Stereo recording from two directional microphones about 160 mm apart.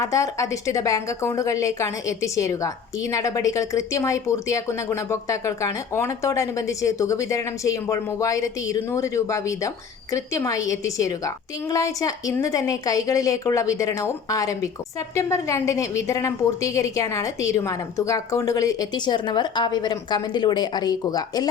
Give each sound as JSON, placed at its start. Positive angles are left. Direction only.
{"t": 0.0, "sound": "a woman's voice", "side_deg": 20}